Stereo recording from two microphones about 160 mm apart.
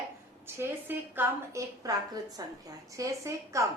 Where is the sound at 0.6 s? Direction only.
15° right (ahead or behind).